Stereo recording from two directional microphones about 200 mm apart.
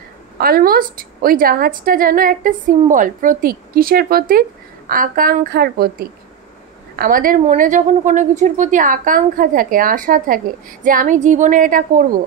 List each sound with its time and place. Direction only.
0.4 s a woman's voice: 50° right (ahead or behind)